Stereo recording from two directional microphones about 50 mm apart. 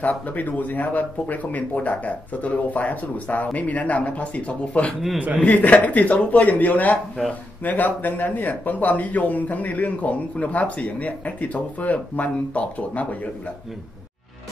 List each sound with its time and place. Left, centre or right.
0.0 s speech: left